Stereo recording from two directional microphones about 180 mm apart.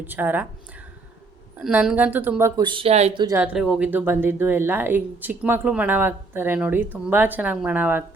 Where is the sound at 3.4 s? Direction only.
5° right (ahead or behind).